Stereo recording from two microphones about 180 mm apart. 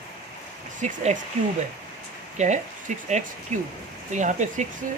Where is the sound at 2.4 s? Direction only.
40° right (ahead or behind).